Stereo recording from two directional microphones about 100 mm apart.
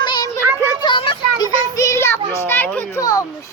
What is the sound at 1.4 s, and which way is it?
Child singing, 35° left (ahead or behind).